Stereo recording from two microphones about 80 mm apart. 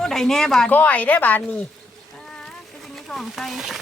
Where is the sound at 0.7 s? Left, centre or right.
Centre.